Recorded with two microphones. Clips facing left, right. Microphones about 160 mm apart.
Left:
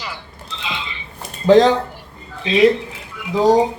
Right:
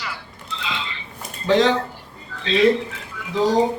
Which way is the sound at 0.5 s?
20° left (ahead or behind).